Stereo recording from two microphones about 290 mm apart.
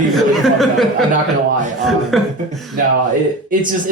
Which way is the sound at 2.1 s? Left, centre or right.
Centre.